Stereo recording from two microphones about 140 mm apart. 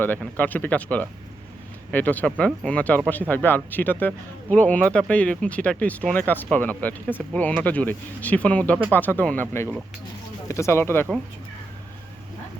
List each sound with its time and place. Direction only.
0.2 s speech: 10° left (ahead or behind)